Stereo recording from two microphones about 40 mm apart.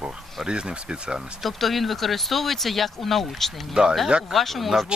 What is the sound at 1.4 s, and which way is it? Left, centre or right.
Speech, centre.